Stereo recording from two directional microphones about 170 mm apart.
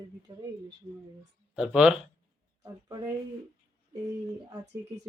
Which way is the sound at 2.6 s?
20° right (ahead or behind).